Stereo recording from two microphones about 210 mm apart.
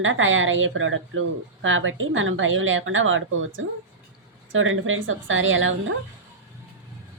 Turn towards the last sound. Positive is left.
turn(degrees=-65)  # may be behind; listen again after turning